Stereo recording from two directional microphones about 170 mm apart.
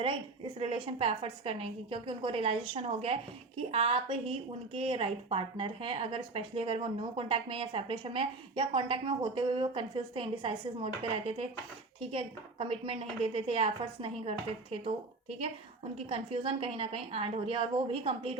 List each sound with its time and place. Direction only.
0.6 s a woman's voice: 35° right (ahead or behind)
16.0 s a woman's voice: 35° right (ahead or behind)